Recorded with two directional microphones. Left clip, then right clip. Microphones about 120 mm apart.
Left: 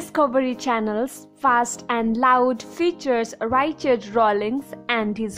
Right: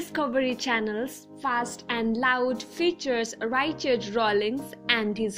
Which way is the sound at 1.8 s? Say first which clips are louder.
Left 6 dB; 45° left (ahead or behind).